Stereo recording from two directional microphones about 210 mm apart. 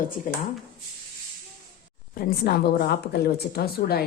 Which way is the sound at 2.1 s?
45° left (ahead or behind).